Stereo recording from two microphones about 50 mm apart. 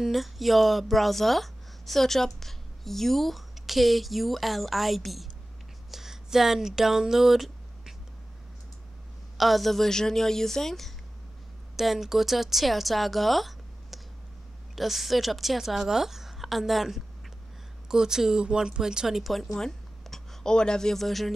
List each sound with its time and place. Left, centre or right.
0.0 s speech: centre
5.9 s a sound: centre
9.4 s a woman's voice: centre
11.7 s a woman's voice: centre